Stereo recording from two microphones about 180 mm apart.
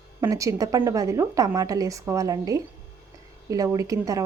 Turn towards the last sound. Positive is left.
turn(degrees=-20)  # may be behind; listen again after turning